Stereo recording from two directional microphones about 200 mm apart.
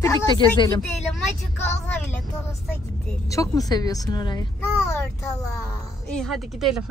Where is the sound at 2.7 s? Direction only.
15° left (ahead or behind).